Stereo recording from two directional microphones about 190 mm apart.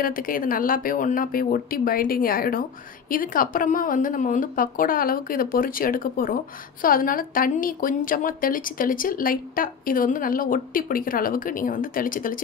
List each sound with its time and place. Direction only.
0.0 s a woman's voice: 50° left (ahead or behind)